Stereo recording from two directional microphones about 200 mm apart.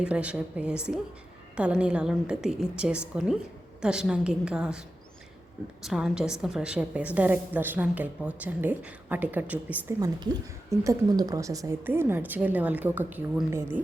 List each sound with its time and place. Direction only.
0.0 s a woman's voice: 5° right (ahead or behind)
5.8 s a woman's voice: centre (ahead or behind)